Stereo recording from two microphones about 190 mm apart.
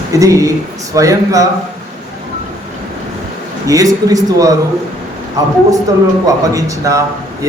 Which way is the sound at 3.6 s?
20° right (ahead or behind).